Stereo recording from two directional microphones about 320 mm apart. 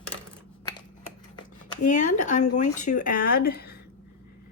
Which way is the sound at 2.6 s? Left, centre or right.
Left.